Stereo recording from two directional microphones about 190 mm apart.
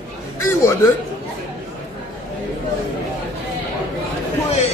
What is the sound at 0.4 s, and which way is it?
Speech, 15° left (ahead or behind).